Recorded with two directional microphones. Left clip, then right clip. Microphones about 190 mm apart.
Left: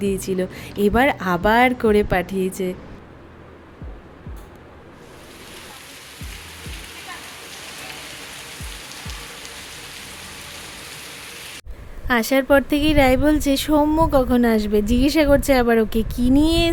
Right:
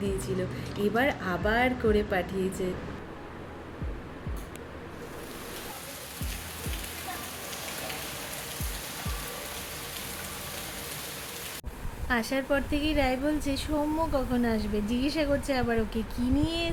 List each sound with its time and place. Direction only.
0.0 s a woman's voice: 50° left (ahead or behind)
12.0 s a woman's voice: 50° left (ahead or behind)